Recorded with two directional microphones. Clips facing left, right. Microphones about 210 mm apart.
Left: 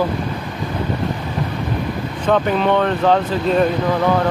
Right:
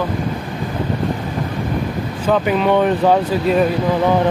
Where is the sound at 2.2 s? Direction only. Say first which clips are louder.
Right 1 dB; 5° right (ahead or behind).